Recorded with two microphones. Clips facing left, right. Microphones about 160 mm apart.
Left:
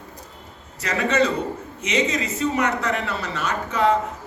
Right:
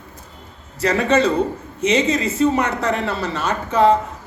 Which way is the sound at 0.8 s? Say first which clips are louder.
Right 4 dB; 30° right (ahead or behind).